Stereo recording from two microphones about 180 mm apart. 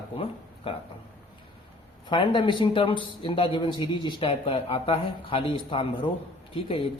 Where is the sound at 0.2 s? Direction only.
30° left (ahead or behind).